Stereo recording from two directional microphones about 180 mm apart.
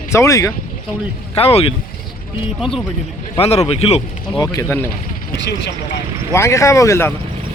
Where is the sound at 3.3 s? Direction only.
35° left (ahead or behind).